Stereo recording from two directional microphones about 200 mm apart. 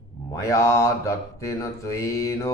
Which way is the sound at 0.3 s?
15° left (ahead or behind).